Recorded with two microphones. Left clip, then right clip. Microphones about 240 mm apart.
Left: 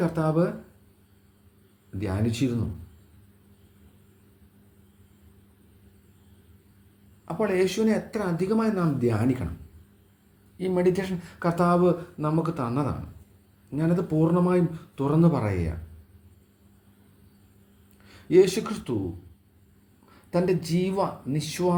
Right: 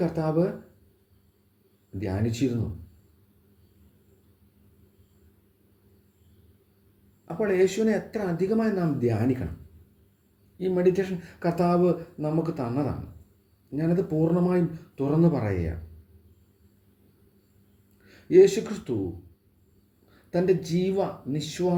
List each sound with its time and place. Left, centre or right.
0.0 s speech: left
2.0 s speech: left
7.3 s speech: left
10.6 s speech: left
18.1 s speech: left
20.3 s speech: left